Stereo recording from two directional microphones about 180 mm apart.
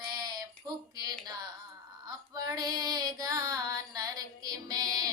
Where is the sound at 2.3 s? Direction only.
20° right (ahead or behind).